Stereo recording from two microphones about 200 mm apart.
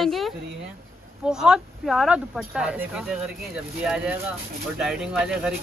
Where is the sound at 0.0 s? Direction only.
Centre (ahead or behind).